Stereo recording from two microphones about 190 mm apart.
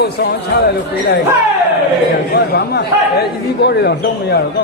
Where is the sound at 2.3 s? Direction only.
55° left (ahead or behind).